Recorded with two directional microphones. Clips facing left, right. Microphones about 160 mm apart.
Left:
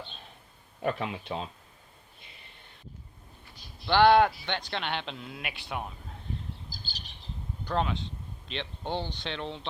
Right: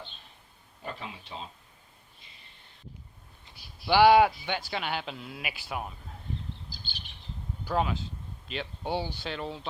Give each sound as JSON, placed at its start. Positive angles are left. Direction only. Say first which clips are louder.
{"t": 0.8, "sound": "speech", "louder": "left 9 dB", "side_deg": 65}
{"t": 3.5, "sound": "speech", "louder": "right 1 dB", "side_deg": -10}
{"t": 6.7, "sound": "bird", "louder": "left 1 dB", "side_deg": 40}
{"t": 7.6, "sound": "speech", "louder": "right 1 dB", "side_deg": -5}